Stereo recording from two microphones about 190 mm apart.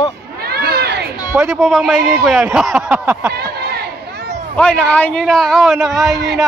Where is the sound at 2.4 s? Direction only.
10° right (ahead or behind).